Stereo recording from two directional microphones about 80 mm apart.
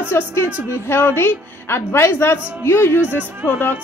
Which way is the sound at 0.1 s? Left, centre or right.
Left.